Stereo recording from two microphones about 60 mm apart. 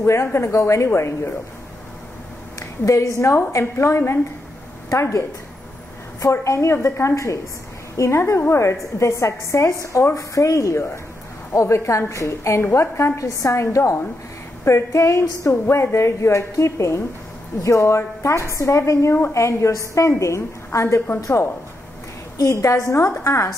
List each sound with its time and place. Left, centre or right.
0.0 s a woman's voice: left
0.5 s a woman's voice: left
2.8 s a woman's voice: left
6.4 s a woman's voice: left
13.2 s a woman's voice: left